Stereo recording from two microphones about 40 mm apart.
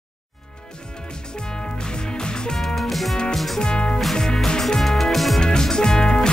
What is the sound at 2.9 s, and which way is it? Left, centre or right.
Music, centre.